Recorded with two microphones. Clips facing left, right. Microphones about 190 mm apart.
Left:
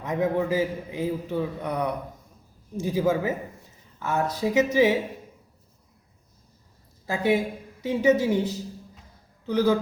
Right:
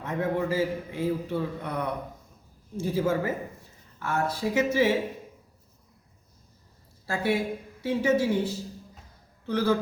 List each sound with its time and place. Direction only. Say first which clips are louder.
0.0 s a man's voice: left 3 dB; 15° left (ahead or behind)
7.1 s a man's voice: left 3 dB; 20° left (ahead or behind)